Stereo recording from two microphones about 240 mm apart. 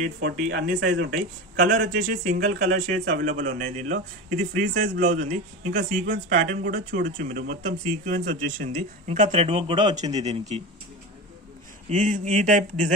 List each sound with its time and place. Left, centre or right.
0.0 s speech: right
1.6 s speech: right
3.1 s speech: right
3.5 s speech: right
11.9 s speech: right